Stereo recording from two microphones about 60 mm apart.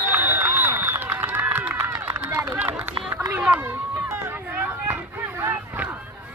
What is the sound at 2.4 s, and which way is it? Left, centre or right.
Run, right.